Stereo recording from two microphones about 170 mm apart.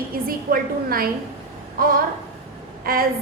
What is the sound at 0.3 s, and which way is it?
Speech, 60° right (ahead or behind).